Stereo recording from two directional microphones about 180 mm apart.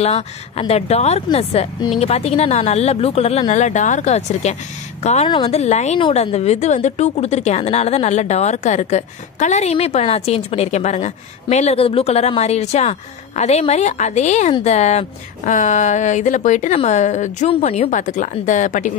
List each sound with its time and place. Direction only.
0.0 s a woman's voice: 35° left (ahead or behind)